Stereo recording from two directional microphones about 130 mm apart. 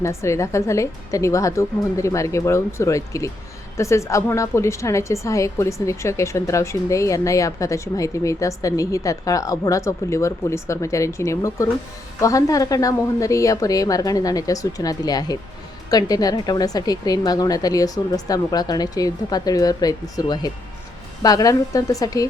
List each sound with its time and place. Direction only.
0.0 s a woman's voice: 20° left (ahead or behind)